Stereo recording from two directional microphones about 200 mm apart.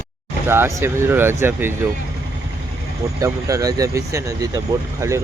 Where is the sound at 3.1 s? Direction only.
15° right (ahead or behind).